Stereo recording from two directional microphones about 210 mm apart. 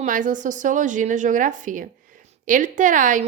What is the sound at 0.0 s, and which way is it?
A woman's voice, 40° right (ahead or behind).